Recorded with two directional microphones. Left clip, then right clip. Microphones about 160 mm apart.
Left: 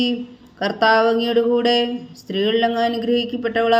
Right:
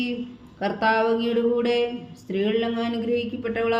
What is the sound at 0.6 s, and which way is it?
A man's voice, 50° left (ahead or behind).